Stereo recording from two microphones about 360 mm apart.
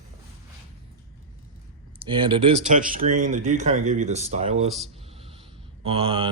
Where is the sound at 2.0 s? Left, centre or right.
Centre.